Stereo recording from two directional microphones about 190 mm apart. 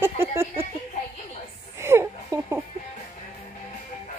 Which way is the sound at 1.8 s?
15° right (ahead or behind).